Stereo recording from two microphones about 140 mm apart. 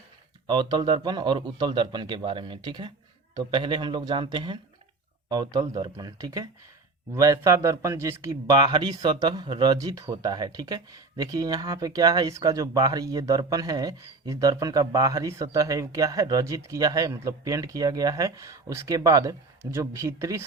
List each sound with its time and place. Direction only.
0.4 s a man's voice: 30° right (ahead or behind)